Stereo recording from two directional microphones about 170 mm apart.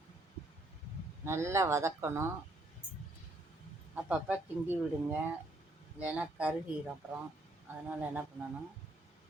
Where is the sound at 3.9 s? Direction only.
5° right (ahead or behind).